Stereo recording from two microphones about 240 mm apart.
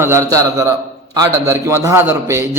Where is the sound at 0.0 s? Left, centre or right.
Centre.